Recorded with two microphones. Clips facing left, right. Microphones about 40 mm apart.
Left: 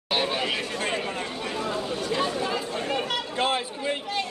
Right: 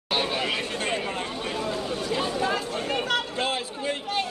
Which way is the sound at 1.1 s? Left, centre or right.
Right.